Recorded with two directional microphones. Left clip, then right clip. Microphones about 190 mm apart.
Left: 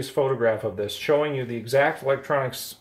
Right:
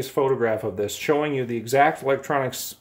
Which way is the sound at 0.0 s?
35° right (ahead or behind).